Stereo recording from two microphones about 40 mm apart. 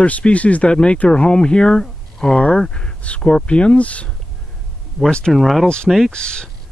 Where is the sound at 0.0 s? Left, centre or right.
Left.